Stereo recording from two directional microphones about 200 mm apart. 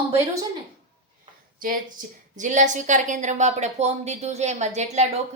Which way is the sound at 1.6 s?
45° right (ahead or behind).